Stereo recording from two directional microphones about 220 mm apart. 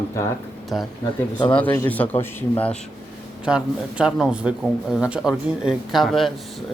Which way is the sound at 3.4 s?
5° right (ahead or behind).